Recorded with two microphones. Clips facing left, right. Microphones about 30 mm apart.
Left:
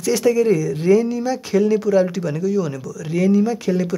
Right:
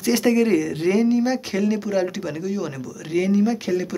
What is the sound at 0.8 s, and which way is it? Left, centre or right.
Speech, centre.